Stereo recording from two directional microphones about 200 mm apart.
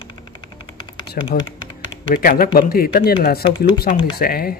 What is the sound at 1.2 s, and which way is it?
Speech, 45° left (ahead or behind).